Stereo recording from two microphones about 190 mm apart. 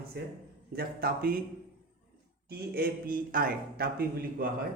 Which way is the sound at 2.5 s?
55° right (ahead or behind).